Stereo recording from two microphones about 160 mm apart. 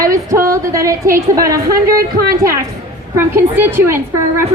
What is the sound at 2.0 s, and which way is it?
Speech, 70° right (ahead or behind).